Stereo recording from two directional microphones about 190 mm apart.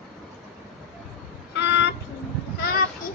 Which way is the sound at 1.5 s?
65° left (ahead or behind).